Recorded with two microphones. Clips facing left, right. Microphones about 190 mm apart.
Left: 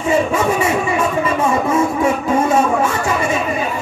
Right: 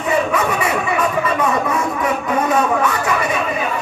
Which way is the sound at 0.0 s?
25° left (ahead or behind).